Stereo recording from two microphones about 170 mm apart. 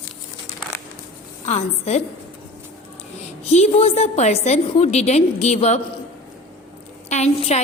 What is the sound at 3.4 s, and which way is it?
A woman's voice, 40° left (ahead or behind).